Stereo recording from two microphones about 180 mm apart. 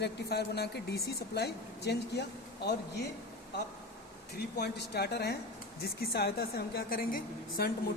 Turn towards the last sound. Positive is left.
turn(degrees=55)  # may be behind; listen again after turning